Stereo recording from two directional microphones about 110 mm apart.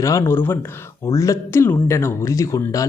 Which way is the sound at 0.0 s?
25° left (ahead or behind).